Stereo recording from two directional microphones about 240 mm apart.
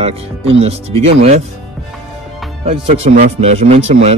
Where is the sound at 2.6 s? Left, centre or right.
Right.